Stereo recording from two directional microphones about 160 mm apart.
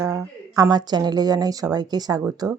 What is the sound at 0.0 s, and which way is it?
A woman's voice, 20° right (ahead or behind).